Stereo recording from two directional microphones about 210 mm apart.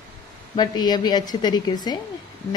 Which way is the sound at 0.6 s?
20° left (ahead or behind).